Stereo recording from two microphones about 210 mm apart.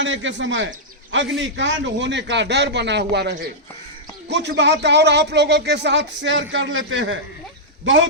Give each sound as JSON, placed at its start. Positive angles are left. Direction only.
{"t": 0.0, "sound": "speech", "side_deg": -60}